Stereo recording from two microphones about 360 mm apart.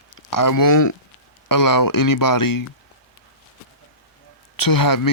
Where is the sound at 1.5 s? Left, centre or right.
Left.